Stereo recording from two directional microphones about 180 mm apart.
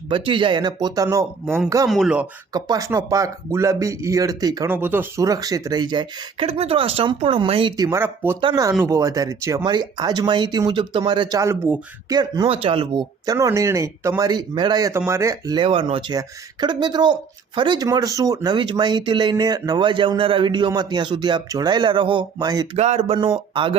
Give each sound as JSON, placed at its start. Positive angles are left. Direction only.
{"t": 0.1, "sound": "speech", "side_deg": -30}
{"t": 1.9, "sound": "speech", "side_deg": -5}
{"t": 2.5, "sound": "speech", "side_deg": -20}
{"t": 7.8, "sound": "speech", "side_deg": -15}
{"t": 8.4, "sound": "speech", "side_deg": -25}
{"t": 22.8, "sound": "speech", "side_deg": -35}